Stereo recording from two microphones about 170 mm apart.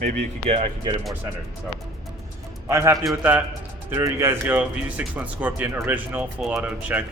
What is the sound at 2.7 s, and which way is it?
Speech, 15° right (ahead or behind).